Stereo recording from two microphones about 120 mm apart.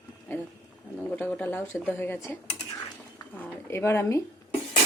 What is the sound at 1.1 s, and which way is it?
Speech, 15° left (ahead or behind).